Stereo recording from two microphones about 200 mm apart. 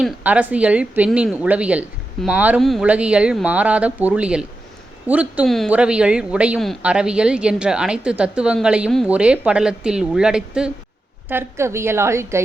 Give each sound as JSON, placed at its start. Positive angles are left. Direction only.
{"t": 0.0, "sound": "a woman's voice", "side_deg": -5}